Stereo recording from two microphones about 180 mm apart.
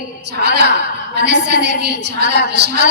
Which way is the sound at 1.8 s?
70° right (ahead or behind).